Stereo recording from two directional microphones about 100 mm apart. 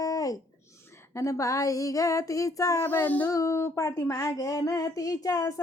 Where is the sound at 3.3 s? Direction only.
30° left (ahead or behind).